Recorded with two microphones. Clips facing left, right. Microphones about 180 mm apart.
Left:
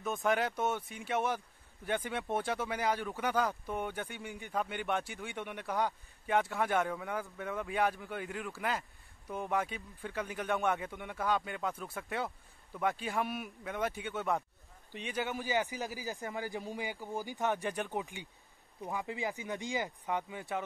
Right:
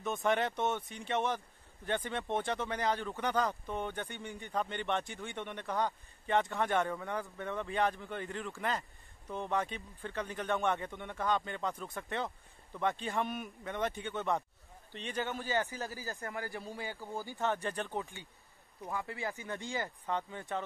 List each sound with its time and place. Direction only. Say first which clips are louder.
0.0 s a man's voice: even; centre (ahead or behind)